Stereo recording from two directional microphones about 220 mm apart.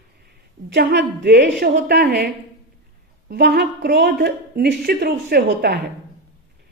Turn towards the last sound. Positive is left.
turn(degrees=-45)  # may be behind; listen again after turning